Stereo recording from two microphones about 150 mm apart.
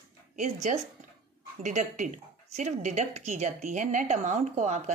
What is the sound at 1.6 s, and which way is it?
Speech, 55° right (ahead or behind).